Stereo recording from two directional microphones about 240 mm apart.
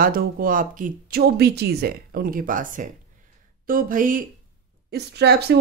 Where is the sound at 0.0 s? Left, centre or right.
Right.